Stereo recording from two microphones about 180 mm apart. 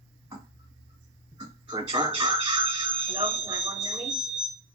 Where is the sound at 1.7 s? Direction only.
25° right (ahead or behind).